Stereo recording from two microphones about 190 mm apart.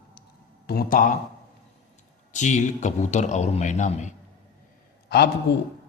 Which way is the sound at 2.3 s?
40° left (ahead or behind).